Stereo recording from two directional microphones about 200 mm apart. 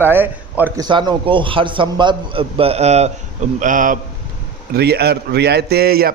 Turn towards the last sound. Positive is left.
turn(degrees=-50)  # may be behind; listen again after turning